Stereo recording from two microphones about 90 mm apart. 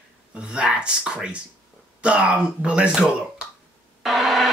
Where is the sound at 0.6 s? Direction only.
10° right (ahead or behind).